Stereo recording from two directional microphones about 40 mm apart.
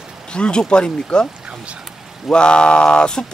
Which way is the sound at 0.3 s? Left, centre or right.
Left.